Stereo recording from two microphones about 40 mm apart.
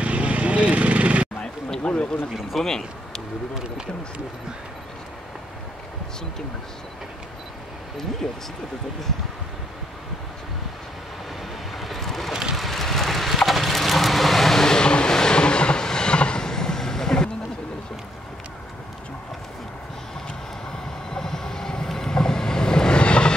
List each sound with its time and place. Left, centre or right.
0.0 s vehicle: right
1.8 s speech: left
2.6 s speech: centre
11.7 s vehicle: centre
12.3 s vehicle: centre
12.5 s vehicle: centre
21.1 s vehicle: centre